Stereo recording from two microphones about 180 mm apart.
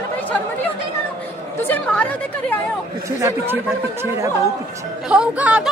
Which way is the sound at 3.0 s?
15° right (ahead or behind).